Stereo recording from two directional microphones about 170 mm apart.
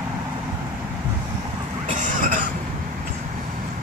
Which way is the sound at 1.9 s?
50° right (ahead or behind).